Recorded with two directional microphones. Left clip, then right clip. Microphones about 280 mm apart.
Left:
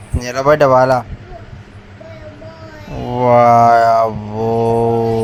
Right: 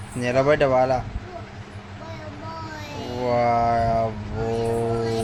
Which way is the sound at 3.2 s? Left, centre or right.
Left.